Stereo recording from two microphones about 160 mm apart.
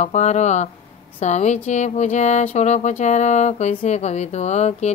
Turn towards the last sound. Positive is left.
turn(degrees=45)  # may be behind; listen again after turning